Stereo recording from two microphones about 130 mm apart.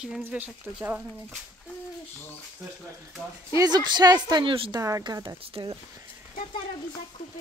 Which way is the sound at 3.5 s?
30° right (ahead or behind).